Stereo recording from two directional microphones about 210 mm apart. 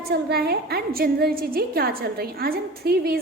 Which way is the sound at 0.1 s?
50° right (ahead or behind).